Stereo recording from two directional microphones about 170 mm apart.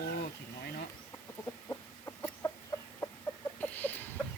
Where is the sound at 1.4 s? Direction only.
10° left (ahead or behind).